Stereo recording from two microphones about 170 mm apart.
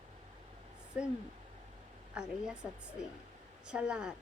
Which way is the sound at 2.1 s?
5° right (ahead or behind).